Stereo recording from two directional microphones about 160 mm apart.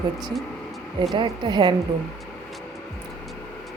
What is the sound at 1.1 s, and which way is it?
Speech, 30° right (ahead or behind).